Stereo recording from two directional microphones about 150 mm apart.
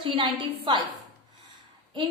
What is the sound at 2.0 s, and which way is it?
Speech, 30° right (ahead or behind).